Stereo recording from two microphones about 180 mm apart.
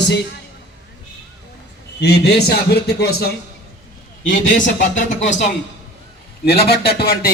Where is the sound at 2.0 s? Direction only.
65° left (ahead or behind).